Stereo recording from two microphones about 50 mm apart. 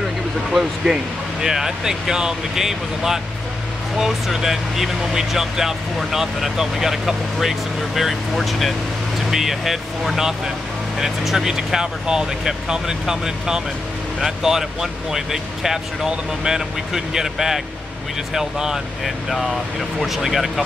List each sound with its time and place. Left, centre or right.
0.8 s speech: centre